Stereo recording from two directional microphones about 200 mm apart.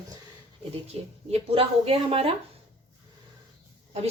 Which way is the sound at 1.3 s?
30° right (ahead or behind).